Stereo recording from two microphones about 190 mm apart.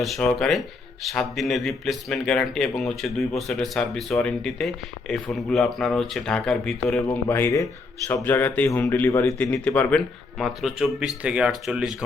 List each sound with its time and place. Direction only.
0.0 s a man's voice: centre (ahead or behind)
7.0 s speech: 15° left (ahead or behind); by 11.9 s centre (ahead or behind)